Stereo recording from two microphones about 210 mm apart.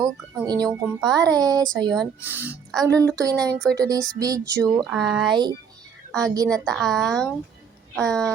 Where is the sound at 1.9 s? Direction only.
Centre (ahead or behind).